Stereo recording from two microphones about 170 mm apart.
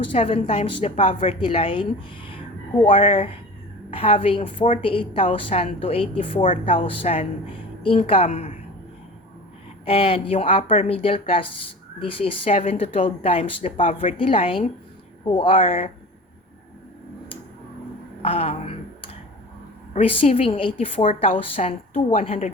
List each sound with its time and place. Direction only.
0.1 s a woman's voice: 35° left (ahead or behind)
9.8 s a woman's voice: 35° left (ahead or behind)
13.7 s speech: 50° left (ahead or behind)
14.2 s a woman's voice: 35° left (ahead or behind)
18.2 s a sound: 35° left (ahead or behind)
19.9 s a woman's voice: 35° left (ahead or behind)